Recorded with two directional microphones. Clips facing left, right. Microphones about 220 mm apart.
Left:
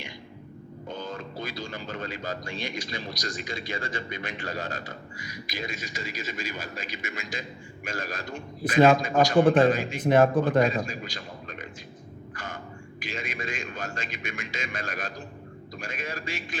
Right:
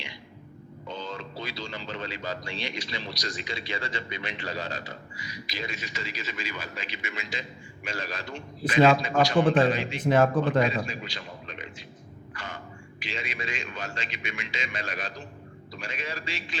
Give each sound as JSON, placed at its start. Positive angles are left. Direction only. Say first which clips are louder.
{"t": 0.9, "sound": "a man's voice", "louder": "left 1 dB", "side_deg": 50}
{"t": 12.3, "sound": "a sound", "louder": "left 1 dB", "side_deg": 45}
{"t": 13.0, "sound": "speech", "louder": "left 1 dB", "side_deg": 50}